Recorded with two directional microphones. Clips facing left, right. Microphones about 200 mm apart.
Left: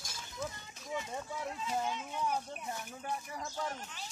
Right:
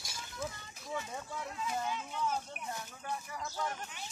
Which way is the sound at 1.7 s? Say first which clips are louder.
Left 2 dB; 15° left (ahead or behind).